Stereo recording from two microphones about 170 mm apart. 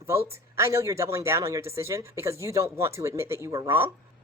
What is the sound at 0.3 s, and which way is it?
Speech, 15° right (ahead or behind).